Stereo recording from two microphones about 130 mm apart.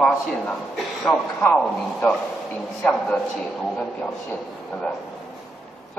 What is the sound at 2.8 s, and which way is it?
Speech, 10° left (ahead or behind).